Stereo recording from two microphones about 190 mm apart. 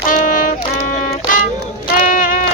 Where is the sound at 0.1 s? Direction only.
45° left (ahead or behind).